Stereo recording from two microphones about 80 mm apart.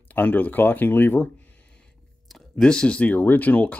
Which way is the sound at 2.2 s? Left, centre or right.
Centre.